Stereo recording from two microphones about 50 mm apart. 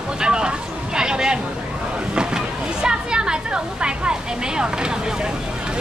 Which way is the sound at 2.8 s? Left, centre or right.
Centre.